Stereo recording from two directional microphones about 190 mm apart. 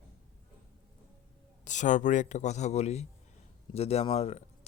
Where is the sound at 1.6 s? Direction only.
40° left (ahead or behind).